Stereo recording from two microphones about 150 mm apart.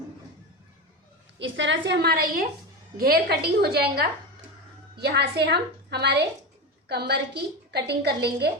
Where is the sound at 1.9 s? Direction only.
90° right.